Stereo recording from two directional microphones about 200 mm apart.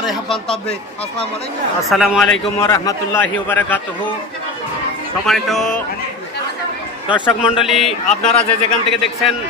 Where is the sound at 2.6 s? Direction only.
15° left (ahead or behind).